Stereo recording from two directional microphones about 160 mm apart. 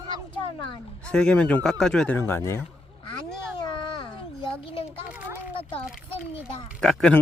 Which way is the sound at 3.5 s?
30° left (ahead or behind).